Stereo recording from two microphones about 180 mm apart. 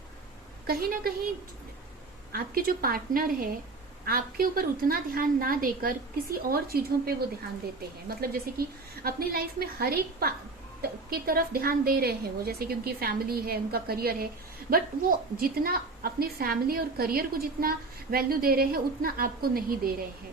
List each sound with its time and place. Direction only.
0.7 s a woman's voice: 55° right (ahead or behind)
2.3 s a woman's voice: 55° right (ahead or behind)